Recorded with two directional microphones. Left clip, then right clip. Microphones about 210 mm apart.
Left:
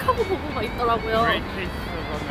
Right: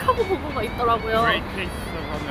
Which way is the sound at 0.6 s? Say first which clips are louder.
Right 1 dB; 15° right (ahead or behind).